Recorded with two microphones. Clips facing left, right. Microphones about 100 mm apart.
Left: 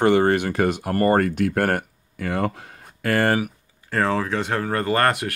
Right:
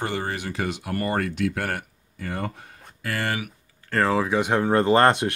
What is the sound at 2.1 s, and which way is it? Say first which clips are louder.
Speech: left 6 dB; 85° left.